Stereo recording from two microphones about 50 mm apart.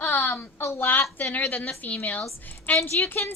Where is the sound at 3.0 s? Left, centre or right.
Left.